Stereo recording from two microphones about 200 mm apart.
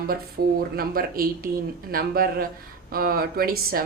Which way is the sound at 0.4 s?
75° right (ahead or behind).